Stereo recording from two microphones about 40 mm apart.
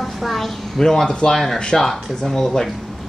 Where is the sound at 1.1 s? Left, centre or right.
Left.